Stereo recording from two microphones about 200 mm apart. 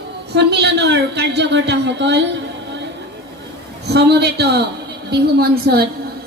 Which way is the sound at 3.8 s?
55° right (ahead or behind).